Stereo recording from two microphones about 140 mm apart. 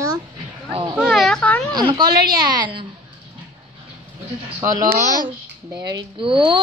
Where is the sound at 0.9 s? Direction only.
5° right (ahead or behind).